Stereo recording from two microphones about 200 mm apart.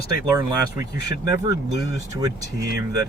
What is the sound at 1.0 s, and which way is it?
Speech, 15° right (ahead or behind).